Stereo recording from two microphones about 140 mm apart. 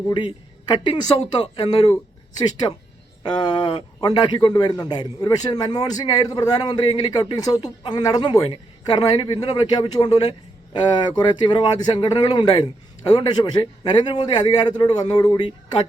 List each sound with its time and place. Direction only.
0.1 s a woman's voice: 35° left (ahead or behind)
2.4 s a man's voice: 30° left (ahead or behind)
11.2 s a man's voice: 30° left (ahead or behind)